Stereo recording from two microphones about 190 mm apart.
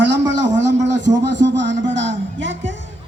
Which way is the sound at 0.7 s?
70° right (ahead or behind).